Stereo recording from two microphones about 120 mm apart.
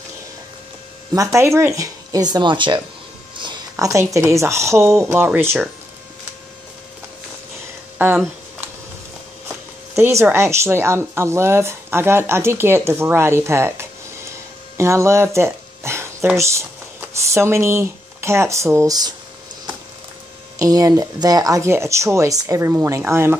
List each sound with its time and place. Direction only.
1.1 s speech: 25° right (ahead or behind)
3.7 s speech: 25° right (ahead or behind)
8.0 s speech: 20° right (ahead or behind)
9.9 s speech: 25° right (ahead or behind)
14.3 s a sound: 25° right (ahead or behind)
17.3 s speech: 20° right (ahead or behind)
20.5 s speech: 30° right (ahead or behind)